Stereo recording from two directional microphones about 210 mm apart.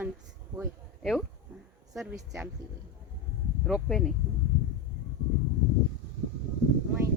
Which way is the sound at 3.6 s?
Centre (ahead or behind).